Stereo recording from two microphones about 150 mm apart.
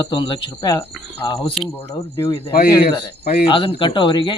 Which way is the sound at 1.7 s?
15° left (ahead or behind).